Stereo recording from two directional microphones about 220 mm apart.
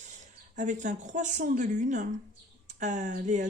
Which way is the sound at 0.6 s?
35° right (ahead or behind).